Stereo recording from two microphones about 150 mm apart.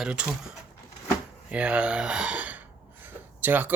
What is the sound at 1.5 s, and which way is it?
Speech, 5° right (ahead or behind).